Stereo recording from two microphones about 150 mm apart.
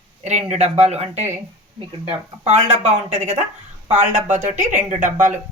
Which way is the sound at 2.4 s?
50° right (ahead or behind).